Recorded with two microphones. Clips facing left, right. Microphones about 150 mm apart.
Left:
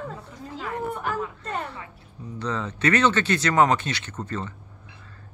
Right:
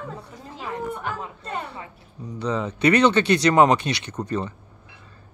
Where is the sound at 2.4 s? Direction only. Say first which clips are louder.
Right 4 dB; 15° right (ahead or behind).